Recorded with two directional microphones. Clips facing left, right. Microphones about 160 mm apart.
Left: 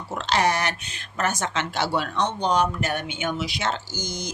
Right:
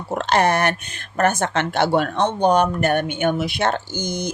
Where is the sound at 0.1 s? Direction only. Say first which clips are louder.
Right 5 dB; 55° right (ahead or behind).